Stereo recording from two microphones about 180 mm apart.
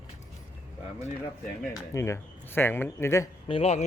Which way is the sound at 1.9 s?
15° left (ahead or behind).